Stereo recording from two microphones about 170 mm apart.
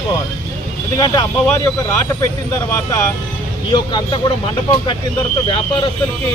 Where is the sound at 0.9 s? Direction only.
20° left (ahead or behind).